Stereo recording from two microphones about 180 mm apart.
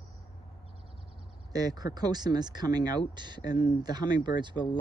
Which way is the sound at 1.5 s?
20° right (ahead or behind).